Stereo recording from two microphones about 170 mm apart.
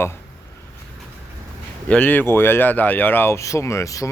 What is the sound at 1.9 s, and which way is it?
Speech, 10° left (ahead or behind).